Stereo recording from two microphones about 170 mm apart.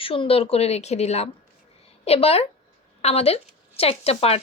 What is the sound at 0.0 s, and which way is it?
A woman's voice, 35° left (ahead or behind).